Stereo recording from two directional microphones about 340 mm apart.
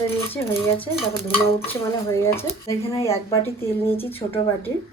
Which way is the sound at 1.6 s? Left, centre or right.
Centre.